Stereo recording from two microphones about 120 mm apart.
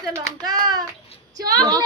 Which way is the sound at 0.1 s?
30° right (ahead or behind).